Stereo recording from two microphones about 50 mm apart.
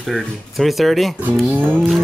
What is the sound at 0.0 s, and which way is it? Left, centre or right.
Speech, centre.